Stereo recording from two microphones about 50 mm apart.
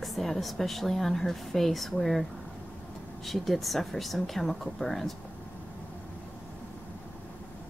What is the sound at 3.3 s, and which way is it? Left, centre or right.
A woman's voice, centre.